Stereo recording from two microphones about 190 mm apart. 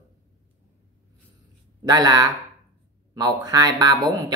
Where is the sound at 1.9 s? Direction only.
20° right (ahead or behind).